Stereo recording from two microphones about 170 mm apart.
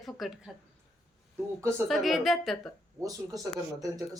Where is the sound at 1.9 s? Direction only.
Centre (ahead or behind).